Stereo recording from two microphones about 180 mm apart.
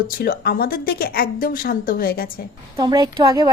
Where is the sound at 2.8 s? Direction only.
20° right (ahead or behind).